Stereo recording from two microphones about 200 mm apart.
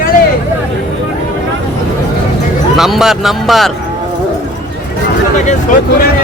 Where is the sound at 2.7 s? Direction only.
Centre (ahead or behind).